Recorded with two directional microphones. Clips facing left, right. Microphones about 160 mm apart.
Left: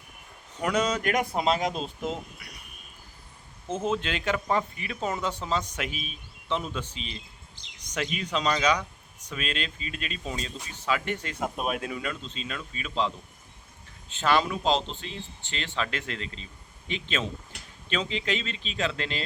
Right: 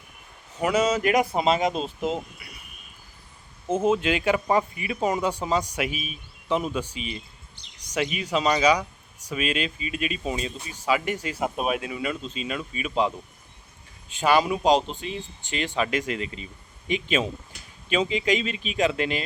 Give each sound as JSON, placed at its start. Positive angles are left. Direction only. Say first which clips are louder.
{"t": 0.6, "sound": "speech", "louder": "right 4 dB", "side_deg": -5}
{"t": 3.7, "sound": "speech", "louder": "right 6 dB", "side_deg": -10}